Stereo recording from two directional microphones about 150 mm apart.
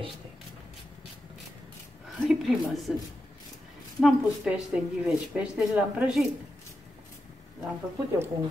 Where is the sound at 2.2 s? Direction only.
Centre (ahead or behind).